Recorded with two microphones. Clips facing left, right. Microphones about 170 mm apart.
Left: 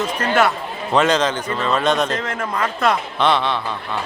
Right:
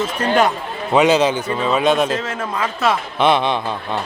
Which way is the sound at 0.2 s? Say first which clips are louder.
Right 2 dB; 15° right (ahead or behind).